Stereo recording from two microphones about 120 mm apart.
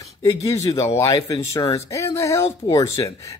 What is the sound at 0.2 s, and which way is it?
Speech, 25° left (ahead or behind).